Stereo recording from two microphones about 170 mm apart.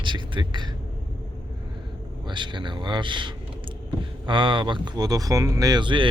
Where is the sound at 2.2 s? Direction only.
25° right (ahead or behind).